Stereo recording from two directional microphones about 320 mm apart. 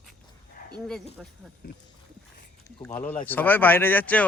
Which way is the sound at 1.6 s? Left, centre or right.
Left.